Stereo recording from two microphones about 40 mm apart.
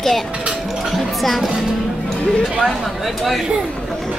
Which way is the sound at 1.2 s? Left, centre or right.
Centre.